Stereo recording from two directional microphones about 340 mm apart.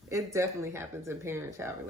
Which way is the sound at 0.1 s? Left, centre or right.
Centre.